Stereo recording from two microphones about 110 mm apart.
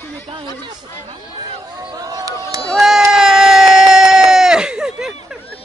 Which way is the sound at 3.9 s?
5° right (ahead or behind).